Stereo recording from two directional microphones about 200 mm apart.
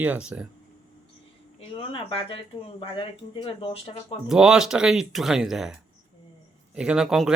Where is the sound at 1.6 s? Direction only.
30° left (ahead or behind).